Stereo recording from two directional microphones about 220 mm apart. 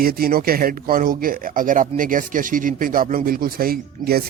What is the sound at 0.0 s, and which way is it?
Speech, 40° right (ahead or behind).